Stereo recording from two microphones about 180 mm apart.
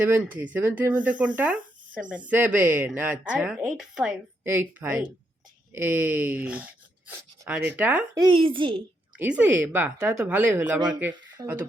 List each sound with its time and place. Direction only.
0.0 s speech: 10° right (ahead or behind)
8.1 s speech: 25° right (ahead or behind)
9.1 s speech: 10° right (ahead or behind)
11.1 s speech: 25° right (ahead or behind)